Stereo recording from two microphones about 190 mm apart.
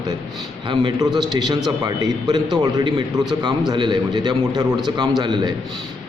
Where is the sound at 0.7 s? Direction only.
25° right (ahead or behind).